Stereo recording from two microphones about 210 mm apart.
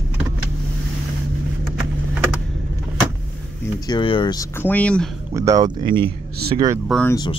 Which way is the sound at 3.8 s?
20° left (ahead or behind).